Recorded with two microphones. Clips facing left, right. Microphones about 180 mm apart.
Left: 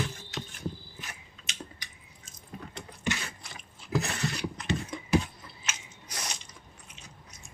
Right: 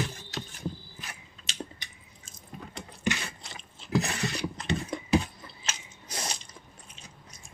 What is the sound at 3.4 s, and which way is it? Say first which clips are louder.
Chewing: right 2 dB; 25° right (ahead or behind).